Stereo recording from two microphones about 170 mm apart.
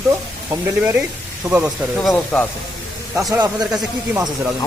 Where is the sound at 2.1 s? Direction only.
10° left (ahead or behind).